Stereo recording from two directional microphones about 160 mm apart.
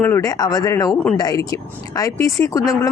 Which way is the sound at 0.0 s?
20° left (ahead or behind).